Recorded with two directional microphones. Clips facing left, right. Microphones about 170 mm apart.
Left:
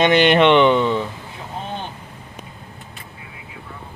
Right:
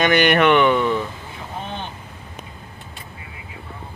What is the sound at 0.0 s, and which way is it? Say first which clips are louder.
Speech: left 2 dB; 25° left (ahead or behind).